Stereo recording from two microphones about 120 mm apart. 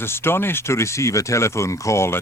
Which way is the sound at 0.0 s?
20° left (ahead or behind).